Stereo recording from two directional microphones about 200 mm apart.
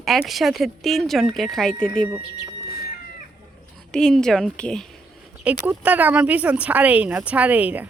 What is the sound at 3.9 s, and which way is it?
Speech, 5° left (ahead or behind).